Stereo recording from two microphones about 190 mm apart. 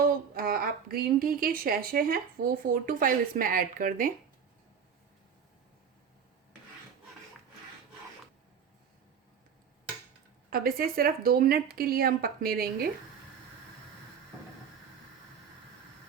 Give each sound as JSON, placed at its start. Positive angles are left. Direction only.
{"t": 0.3, "sound": "a woman's voice", "side_deg": -50}
{"t": 10.5, "sound": "a woman's voice", "side_deg": -50}